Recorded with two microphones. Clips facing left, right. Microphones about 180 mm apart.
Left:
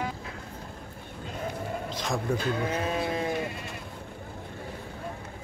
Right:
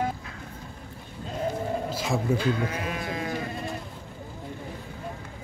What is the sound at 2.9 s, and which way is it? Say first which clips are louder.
Sheep: left 3 dB; 30° left (ahead or behind).